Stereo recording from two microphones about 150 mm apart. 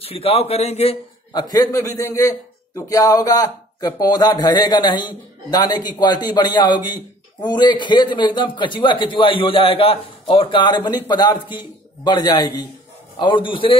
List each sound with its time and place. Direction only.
0.0 s a man's voice: 40° left (ahead or behind)
1.3 s a man's voice: 25° left (ahead or behind)